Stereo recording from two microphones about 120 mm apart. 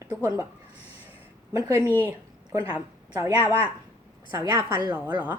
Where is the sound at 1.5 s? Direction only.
25° right (ahead or behind).